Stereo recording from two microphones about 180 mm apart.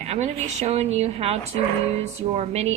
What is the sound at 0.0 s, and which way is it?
A woman's voice, 35° right (ahead or behind).